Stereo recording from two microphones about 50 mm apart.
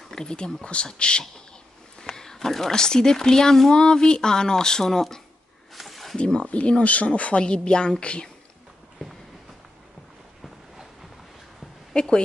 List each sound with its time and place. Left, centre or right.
0.1 s speech: centre
5.8 s snake: centre
6.1 s speech: centre
11.9 s a sound: centre